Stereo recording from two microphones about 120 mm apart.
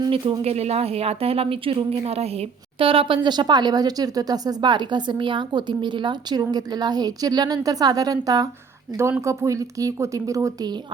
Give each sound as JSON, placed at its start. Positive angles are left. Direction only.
{"t": 0.1, "sound": "speech", "side_deg": -55}